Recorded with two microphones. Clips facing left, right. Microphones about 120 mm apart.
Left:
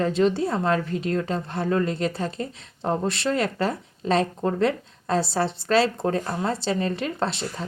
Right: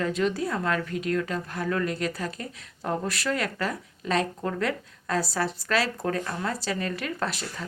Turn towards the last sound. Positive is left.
turn(degrees=25)  # may be behind; listen again after turning